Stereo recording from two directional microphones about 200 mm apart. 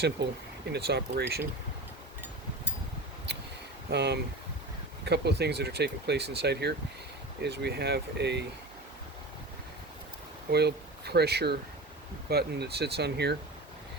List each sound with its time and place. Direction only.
0.2 s speech: 55° right (ahead or behind)
3.8 s speech: 55° right (ahead or behind)
10.5 s speech: 55° right (ahead or behind)